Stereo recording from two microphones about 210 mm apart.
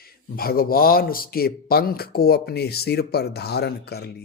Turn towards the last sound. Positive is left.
turn(degrees=50)  # may be behind; listen again after turning